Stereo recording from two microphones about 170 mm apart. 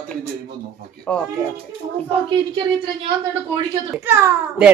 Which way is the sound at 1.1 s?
5° left (ahead or behind).